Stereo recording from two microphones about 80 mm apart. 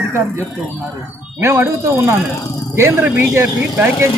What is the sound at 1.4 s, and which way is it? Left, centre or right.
Speech, right.